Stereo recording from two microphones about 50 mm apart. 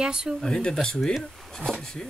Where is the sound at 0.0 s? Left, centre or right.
Centre.